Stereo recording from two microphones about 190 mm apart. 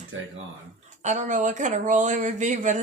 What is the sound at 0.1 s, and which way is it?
Speech, 90° right.